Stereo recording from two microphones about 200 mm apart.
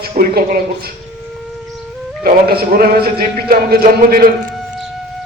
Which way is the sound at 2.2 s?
50° right (ahead or behind).